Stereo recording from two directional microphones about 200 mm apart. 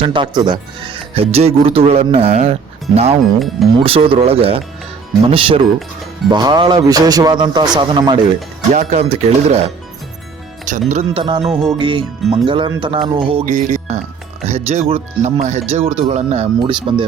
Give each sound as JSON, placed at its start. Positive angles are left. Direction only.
{"t": 0.0, "sound": "speech", "side_deg": -25}
{"t": 8.7, "sound": "speech", "side_deg": -35}
{"t": 10.7, "sound": "speech", "side_deg": -35}
{"t": 13.1, "sound": "music", "side_deg": -25}
{"t": 14.4, "sound": "speech", "side_deg": -30}